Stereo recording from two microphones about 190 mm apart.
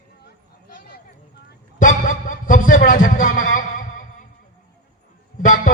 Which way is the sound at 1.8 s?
45° left (ahead or behind).